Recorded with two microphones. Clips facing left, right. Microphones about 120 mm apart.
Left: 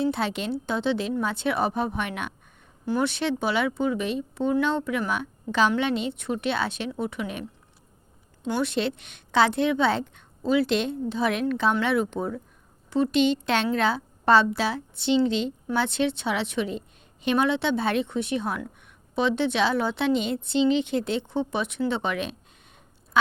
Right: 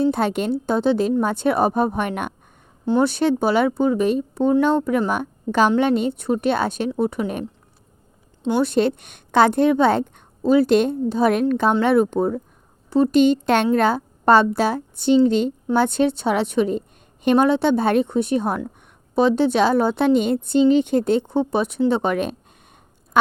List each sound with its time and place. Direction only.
0.0 s a woman's voice: 50° right (ahead or behind)
2.8 s speech: 25° right (ahead or behind)
3.1 s a woman's voice: 40° right (ahead or behind)
8.6 s a woman's voice: 45° right (ahead or behind)